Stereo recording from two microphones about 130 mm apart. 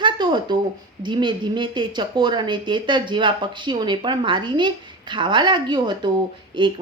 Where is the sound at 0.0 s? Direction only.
35° right (ahead or behind).